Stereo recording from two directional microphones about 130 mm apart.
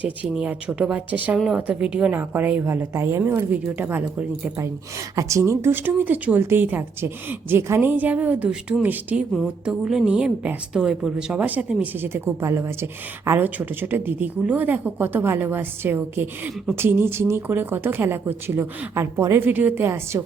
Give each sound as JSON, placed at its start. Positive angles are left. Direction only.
{"t": 0.0, "sound": "a woman's voice", "side_deg": -10}